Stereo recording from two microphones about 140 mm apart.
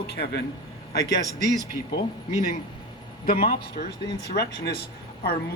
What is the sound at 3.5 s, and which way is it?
Speech, 90° left.